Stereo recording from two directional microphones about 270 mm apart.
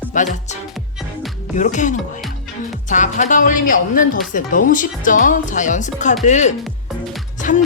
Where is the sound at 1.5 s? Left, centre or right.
Left.